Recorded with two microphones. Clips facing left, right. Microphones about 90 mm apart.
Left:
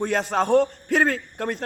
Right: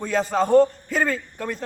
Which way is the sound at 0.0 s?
60° left (ahead or behind).